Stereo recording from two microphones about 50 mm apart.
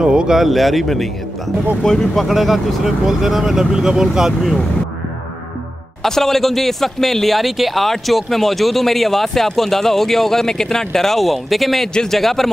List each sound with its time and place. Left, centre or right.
0.0 s speech: centre
0.4 s speech: centre
2.2 s speech: centre
6.0 s speech: centre